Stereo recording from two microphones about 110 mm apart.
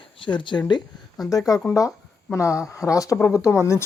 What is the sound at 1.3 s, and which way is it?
Speech, 30° left (ahead or behind).